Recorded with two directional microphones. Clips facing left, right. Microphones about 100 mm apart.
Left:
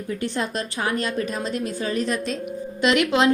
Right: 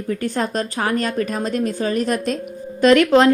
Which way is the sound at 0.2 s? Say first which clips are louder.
Right 4 dB; 45° right (ahead or behind).